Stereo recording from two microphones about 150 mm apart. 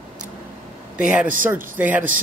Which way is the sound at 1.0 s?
5° right (ahead or behind).